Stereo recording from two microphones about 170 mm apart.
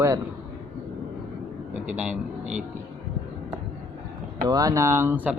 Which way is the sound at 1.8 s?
5° right (ahead or behind).